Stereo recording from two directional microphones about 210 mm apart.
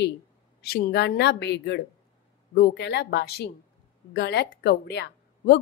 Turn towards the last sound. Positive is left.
turn(degrees=50)  # may be behind; listen again after turning